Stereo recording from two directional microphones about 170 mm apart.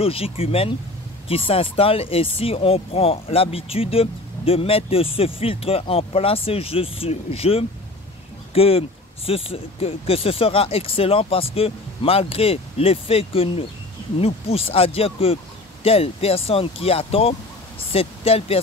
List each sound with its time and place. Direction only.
0.0 s speech: 35° left (ahead or behind)